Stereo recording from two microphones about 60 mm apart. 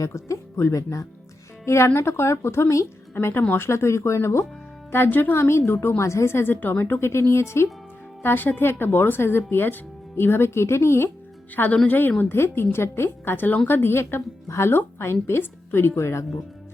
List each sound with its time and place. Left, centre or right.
0.0 s speech: left
1.6 s a woman's voice: left
5.4 s a woman's voice: left
8.2 s speech: left
11.5 s a woman's voice: left